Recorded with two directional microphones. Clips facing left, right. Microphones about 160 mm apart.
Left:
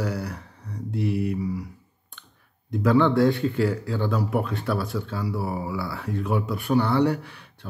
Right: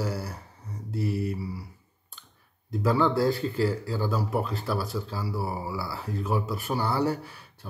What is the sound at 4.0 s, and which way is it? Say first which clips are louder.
Speech: left 3 dB; centre (ahead or behind).